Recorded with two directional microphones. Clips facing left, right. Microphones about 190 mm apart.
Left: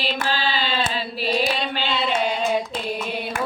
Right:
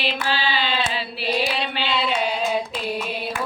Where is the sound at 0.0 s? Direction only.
45° left (ahead or behind).